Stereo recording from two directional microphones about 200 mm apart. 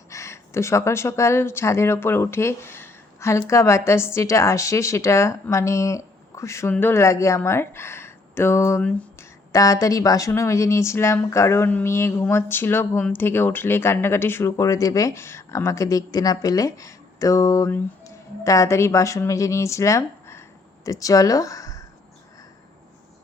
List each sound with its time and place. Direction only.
0.1 s speech: 15° left (ahead or behind)